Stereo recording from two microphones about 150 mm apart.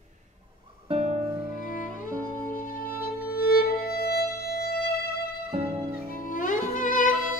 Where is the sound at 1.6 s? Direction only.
65° left (ahead or behind); by 5.3 s 90° left.